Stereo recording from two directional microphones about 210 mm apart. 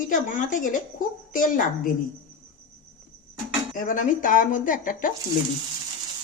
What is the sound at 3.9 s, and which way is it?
Speech, 40° left (ahead or behind).